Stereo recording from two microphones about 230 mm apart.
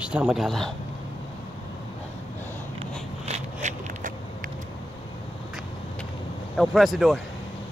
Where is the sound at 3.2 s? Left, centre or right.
Right.